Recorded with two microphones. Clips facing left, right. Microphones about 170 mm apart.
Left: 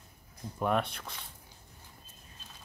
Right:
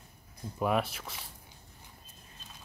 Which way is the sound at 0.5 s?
5° right (ahead or behind).